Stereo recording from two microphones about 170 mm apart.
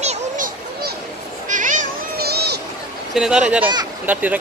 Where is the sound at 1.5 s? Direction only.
50° right (ahead or behind).